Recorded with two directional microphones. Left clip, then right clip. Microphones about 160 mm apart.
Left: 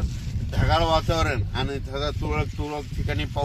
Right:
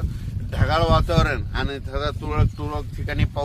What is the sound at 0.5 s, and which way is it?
Speech, 10° left (ahead or behind).